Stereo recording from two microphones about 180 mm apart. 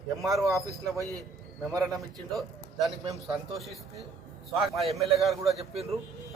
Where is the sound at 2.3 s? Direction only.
Centre (ahead or behind).